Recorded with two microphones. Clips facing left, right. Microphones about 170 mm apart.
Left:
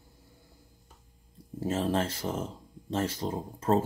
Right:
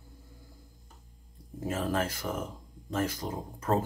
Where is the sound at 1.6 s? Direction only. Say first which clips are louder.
Left 2 dB; 30° left (ahead or behind).